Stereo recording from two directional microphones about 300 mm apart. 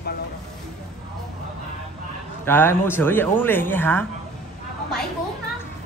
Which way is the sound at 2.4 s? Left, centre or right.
Centre.